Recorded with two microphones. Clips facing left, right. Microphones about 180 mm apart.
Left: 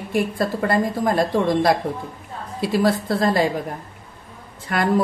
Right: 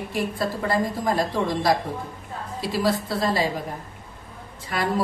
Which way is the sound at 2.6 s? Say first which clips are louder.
Left 4 dB; 55° left (ahead or behind).